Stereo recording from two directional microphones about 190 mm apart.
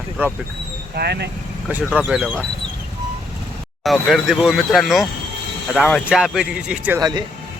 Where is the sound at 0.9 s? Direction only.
60° right (ahead or behind).